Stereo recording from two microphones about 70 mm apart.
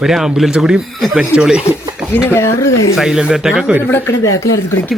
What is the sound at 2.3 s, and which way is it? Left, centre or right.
Speech, left.